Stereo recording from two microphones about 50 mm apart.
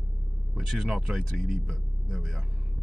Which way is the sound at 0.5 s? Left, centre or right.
Centre.